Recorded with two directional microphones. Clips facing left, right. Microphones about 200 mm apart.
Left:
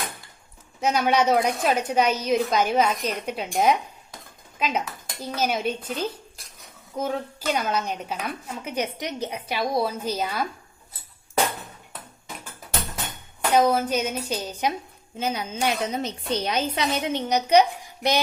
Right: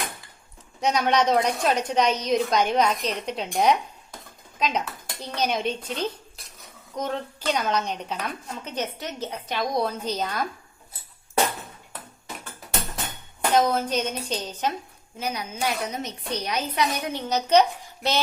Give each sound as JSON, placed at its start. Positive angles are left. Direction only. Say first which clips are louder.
{"t": 0.8, "sound": "a woman's voice", "louder": "left 1 dB", "side_deg": 5}
{"t": 13.5, "sound": "a woman's voice", "louder": "left 2 dB", "side_deg": 10}
{"t": 15.2, "sound": "speech", "louder": "left 3 dB", "side_deg": 25}